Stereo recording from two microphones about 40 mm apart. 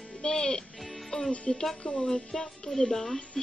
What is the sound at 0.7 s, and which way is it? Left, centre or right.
Music, centre.